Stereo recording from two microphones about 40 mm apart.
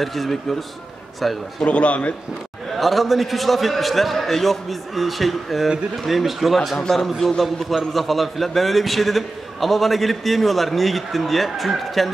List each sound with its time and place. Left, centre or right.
0.0 s a man's voice: centre
1.6 s a man's voice: left
2.7 s a man's voice: centre